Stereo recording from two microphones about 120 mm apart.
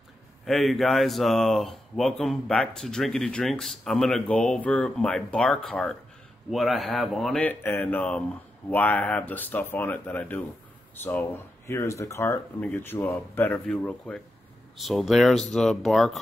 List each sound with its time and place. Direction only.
0.5 s speech: centre (ahead or behind)
7.4 s speech: 15° left (ahead or behind); by 16.2 s centre (ahead or behind)